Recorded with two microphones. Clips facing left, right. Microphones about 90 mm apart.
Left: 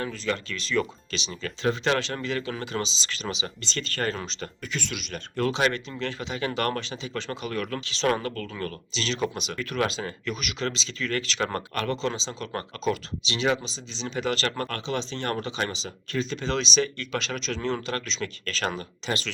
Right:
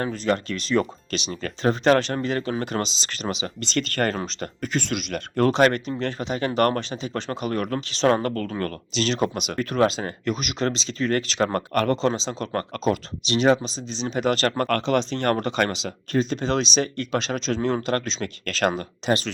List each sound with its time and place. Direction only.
0.0 s speech: 40° right (ahead or behind)
4.2 s speech: 45° right (ahead or behind)
14.7 s speech: 55° right (ahead or behind)
16.1 s speech: 45° right (ahead or behind)